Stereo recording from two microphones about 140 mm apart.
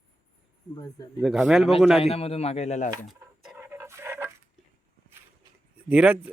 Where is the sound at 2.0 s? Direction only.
45° left (ahead or behind).